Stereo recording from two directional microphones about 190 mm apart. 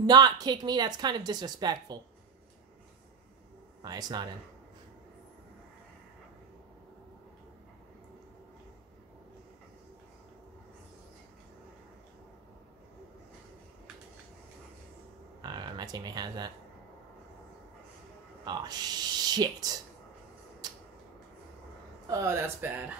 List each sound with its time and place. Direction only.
0.0 s speech: 20° right (ahead or behind)
3.8 s speech: 20° right (ahead or behind)
15.4 s speech: 20° right (ahead or behind)
18.4 s speech: 20° right (ahead or behind)
20.6 s a sound: 20° right (ahead or behind)
22.0 s speech: 15° right (ahead or behind)